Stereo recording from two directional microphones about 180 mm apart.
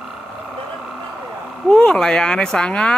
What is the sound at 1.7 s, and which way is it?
Speech, 5° left (ahead or behind).